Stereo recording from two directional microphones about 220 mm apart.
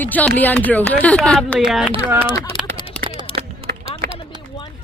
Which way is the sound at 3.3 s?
25° left (ahead or behind).